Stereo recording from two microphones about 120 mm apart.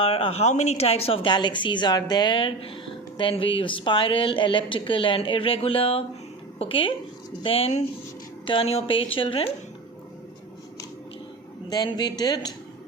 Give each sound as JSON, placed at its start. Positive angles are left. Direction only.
{"t": 0.0, "sound": "speech", "side_deg": 55}
{"t": 11.7, "sound": "speech", "side_deg": 35}